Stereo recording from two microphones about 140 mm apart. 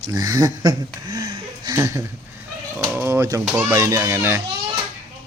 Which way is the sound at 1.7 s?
20° right (ahead or behind).